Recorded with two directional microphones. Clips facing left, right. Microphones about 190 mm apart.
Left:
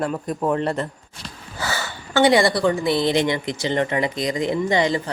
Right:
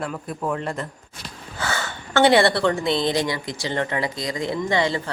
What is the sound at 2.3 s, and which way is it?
Speech, 30° right (ahead or behind).